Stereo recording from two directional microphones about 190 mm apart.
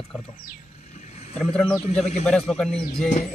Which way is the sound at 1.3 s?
5° left (ahead or behind).